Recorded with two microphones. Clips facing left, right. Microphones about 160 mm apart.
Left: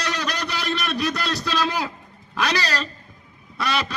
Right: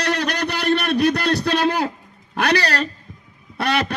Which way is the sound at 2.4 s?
60° right (ahead or behind).